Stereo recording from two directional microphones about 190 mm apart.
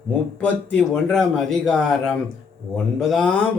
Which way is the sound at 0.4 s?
5° left (ahead or behind).